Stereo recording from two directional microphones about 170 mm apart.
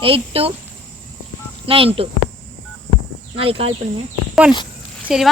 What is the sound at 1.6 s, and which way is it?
Speech, 30° right (ahead or behind).